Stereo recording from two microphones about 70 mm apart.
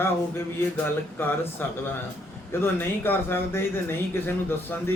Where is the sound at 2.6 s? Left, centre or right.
Left.